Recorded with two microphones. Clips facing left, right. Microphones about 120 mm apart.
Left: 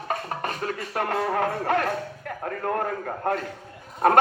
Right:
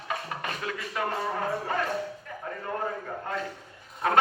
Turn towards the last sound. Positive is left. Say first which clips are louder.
# left 6 dB
turn(degrees=55)  # may be behind; listen again after turning